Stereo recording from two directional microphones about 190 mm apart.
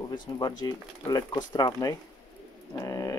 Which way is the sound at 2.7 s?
20° left (ahead or behind).